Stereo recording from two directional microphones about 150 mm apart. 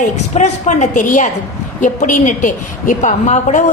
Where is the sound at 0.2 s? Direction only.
50° left (ahead or behind).